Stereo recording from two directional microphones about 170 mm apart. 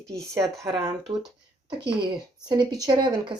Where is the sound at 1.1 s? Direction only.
30° right (ahead or behind).